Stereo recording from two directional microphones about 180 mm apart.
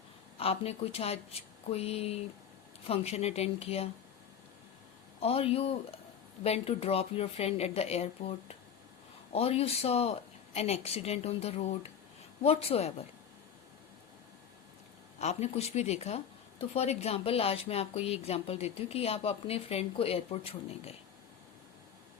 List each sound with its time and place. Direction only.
0.3 s speech: 35° left (ahead or behind)
5.2 s speech: 30° left (ahead or behind)
15.2 s speech: 35° left (ahead or behind)